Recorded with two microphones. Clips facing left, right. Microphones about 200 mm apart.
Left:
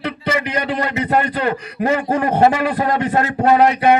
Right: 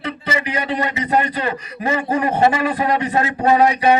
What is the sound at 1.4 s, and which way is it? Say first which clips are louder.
A man's voice: left 4 dB; 45° left (ahead or behind).